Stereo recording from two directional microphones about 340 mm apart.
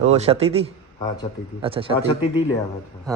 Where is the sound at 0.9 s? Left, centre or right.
Centre.